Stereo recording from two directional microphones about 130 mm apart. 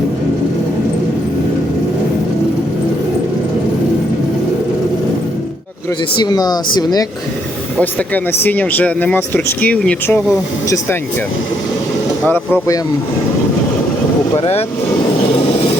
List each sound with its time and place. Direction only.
6.1 s speech: 30° left (ahead or behind)
7.8 s speech: 10° left (ahead or behind)
12.2 s speech: 15° left (ahead or behind)
14.3 s speech: 50° left (ahead or behind)